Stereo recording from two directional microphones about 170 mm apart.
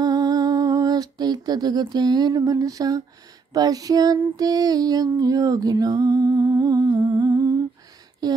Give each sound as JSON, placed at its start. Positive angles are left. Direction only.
{"t": 0.0, "sound": "music", "side_deg": -20}
{"t": 3.5, "sound": "female singing", "side_deg": -20}
{"t": 8.2, "sound": "speech", "side_deg": -25}